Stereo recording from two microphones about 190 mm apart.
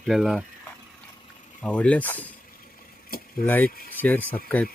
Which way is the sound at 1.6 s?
5° left (ahead or behind).